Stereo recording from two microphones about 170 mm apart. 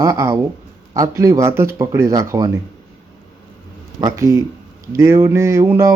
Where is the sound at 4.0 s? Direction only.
20° right (ahead or behind).